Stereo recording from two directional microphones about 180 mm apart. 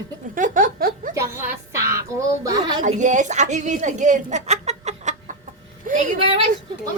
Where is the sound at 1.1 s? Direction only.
15° right (ahead or behind).